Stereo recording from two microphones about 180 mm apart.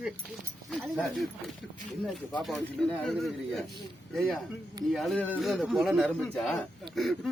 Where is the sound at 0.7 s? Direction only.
Centre (ahead or behind).